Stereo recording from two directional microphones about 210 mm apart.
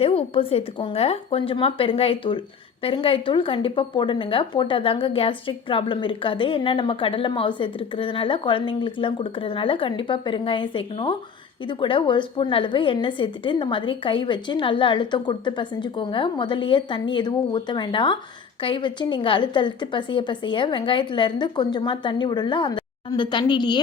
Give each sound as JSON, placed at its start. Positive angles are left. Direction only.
{"t": 0.0, "sound": "speech", "side_deg": 25}